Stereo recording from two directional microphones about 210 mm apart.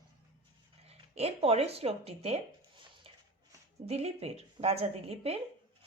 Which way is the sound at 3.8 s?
30° right (ahead or behind).